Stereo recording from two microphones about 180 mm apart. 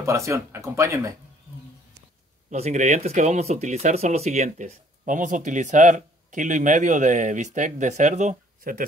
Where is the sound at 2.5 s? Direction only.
40° right (ahead or behind).